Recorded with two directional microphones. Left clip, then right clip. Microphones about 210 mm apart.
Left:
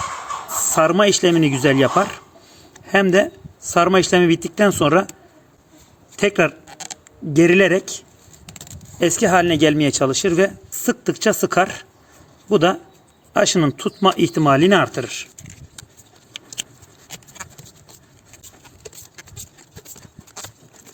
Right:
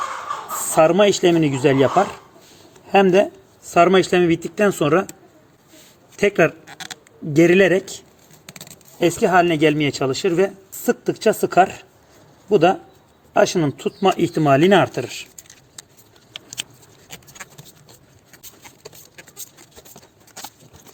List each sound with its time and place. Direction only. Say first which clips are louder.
0.6 s speech: right 1 dB; 15° left (ahead or behind)
6.1 s speech: right 1 dB; 10° left (ahead or behind)